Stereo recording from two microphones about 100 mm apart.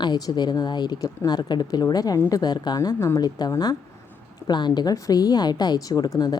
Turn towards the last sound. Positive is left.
turn(degrees=40)  # may be behind; listen again after turning